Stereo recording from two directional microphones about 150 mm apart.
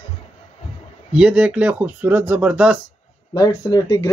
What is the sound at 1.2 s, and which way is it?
Speech, 5° right (ahead or behind).